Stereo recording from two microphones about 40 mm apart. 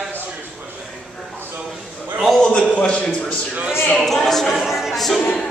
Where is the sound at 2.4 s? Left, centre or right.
Left.